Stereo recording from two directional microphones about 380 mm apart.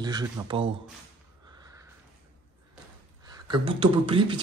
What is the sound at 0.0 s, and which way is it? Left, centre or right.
Speech, centre.